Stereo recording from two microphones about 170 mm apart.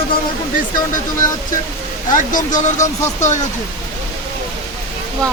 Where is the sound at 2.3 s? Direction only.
50° left (ahead or behind).